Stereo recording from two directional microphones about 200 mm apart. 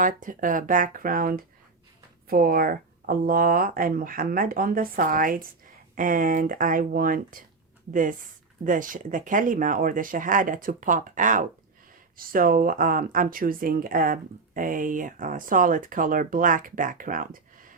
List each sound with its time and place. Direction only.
0.2 s speech: 40° right (ahead or behind)